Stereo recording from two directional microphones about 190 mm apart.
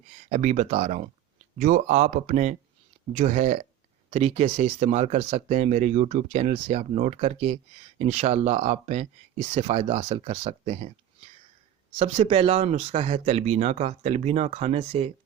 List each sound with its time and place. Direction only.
0.3 s speech: 40° right (ahead or behind)
11.9 s speech: 35° right (ahead or behind)